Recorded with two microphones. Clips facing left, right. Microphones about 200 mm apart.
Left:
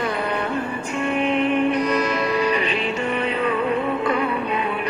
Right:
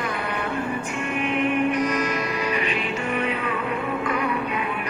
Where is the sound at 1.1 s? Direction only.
30° left (ahead or behind).